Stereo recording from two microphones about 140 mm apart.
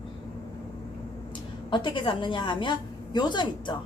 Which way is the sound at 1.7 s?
35° left (ahead or behind).